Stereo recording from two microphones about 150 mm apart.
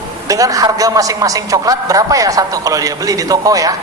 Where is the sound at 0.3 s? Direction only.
20° right (ahead or behind).